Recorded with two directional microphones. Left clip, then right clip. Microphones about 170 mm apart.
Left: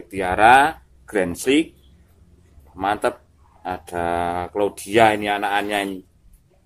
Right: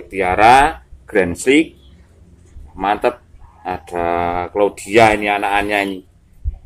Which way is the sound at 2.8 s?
20° left (ahead or behind).